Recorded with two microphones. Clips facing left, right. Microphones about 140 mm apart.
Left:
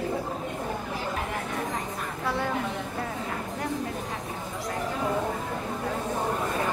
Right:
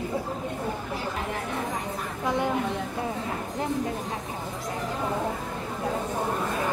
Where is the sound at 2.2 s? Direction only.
20° right (ahead or behind).